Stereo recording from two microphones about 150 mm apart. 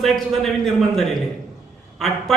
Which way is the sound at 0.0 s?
Centre (ahead or behind).